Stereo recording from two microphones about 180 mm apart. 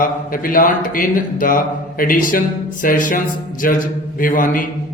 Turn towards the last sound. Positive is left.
turn(degrees=50)  # may be behind; listen again after turning